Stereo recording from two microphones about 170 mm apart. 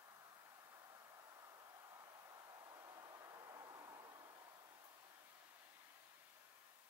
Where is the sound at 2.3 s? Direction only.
20° right (ahead or behind).